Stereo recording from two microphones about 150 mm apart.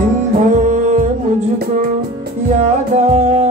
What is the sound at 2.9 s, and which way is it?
Music, 50° right (ahead or behind).